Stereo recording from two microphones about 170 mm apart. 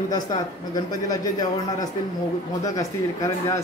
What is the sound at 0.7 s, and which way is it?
Speech, 20° left (ahead or behind).